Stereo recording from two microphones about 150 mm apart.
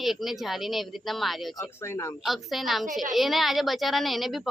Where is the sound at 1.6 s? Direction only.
15° left (ahead or behind).